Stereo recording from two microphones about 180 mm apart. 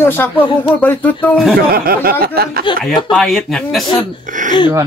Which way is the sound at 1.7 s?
55° right (ahead or behind).